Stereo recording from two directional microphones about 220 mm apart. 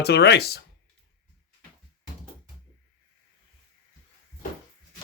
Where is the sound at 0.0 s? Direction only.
50° left (ahead or behind).